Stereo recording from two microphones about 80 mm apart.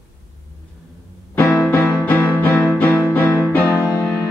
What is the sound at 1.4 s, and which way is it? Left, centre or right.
Music, centre.